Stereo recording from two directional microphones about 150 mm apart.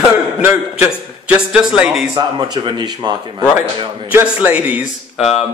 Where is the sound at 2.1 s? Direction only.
30° right (ahead or behind).